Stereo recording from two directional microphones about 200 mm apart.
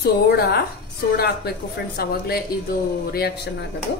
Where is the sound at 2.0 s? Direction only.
50° left (ahead or behind).